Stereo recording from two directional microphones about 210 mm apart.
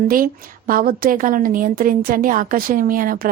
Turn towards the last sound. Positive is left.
turn(degrees=-45)  # may be behind; listen again after turning